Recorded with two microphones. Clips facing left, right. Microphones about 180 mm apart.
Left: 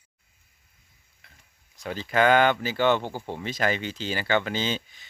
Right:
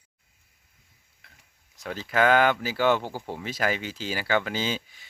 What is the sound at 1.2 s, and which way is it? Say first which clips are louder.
Stir: even; centre (ahead or behind).